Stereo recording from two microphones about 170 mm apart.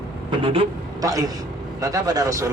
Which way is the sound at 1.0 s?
20° right (ahead or behind).